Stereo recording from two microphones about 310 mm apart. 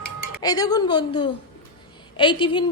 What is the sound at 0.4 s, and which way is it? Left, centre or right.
A woman's voice, centre.